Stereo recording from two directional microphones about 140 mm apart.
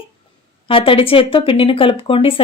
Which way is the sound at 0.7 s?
40° left (ahead or behind).